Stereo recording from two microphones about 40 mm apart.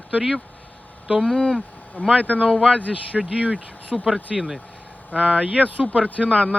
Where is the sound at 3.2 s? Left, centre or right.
Right.